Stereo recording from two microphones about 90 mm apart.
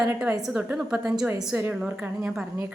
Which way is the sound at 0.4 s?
10° right (ahead or behind).